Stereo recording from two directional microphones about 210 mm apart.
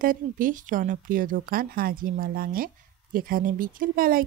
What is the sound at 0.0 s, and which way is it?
Speech, 40° right (ahead or behind).